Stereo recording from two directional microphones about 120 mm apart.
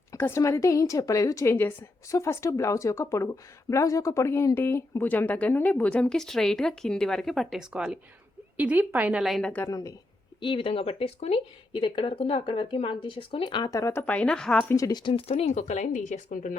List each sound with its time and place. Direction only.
0.1 s a woman's voice: 20° left (ahead or behind); by 9.2 s 15° right (ahead or behind)
9.2 s a woman's voice: centre (ahead or behind)
9.6 s a woman's voice: 25° left (ahead or behind)
10.4 s speech: 45° left (ahead or behind)
13.7 s a woman's voice: 25° left (ahead or behind)
14.0 s speech: 10° left (ahead or behind)
14.7 s a woman's voice: 30° left (ahead or behind)
15.0 s speech: 55° left (ahead or behind); by 16.5 s 90° left